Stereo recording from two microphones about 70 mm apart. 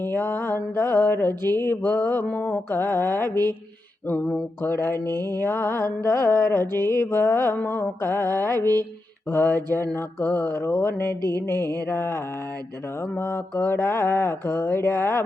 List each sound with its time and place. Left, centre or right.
0.0 s mantra: left
4.1 s a sound: left
4.6 s mantra: left
11.2 s mantra: right
11.4 s mantra: left